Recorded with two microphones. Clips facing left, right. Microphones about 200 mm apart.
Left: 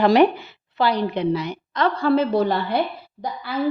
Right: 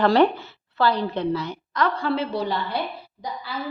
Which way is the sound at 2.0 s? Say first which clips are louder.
Left 6 dB; 45° left (ahead or behind).